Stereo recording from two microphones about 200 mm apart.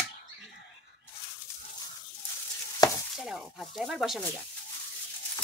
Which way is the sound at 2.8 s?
20° left (ahead or behind).